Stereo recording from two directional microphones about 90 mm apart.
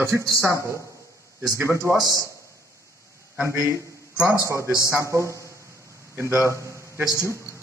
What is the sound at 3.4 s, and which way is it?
A man's voice, 30° right (ahead or behind).